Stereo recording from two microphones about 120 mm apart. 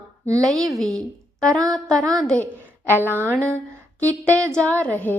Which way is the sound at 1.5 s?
30° right (ahead or behind).